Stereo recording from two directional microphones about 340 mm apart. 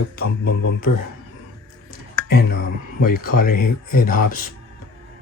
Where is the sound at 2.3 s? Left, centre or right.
Left.